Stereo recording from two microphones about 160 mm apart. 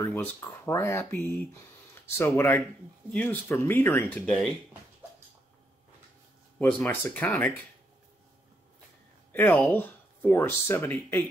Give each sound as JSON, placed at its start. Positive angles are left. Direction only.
{"t": 0.0, "sound": "speech", "side_deg": 10}
{"t": 6.6, "sound": "speech", "side_deg": 10}
{"t": 9.5, "sound": "speech", "side_deg": 10}